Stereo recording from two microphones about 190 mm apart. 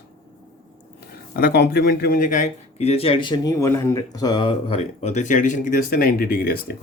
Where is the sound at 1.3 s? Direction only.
50° left (ahead or behind).